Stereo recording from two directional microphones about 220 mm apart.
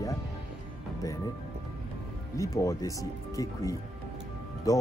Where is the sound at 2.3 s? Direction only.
15° left (ahead or behind).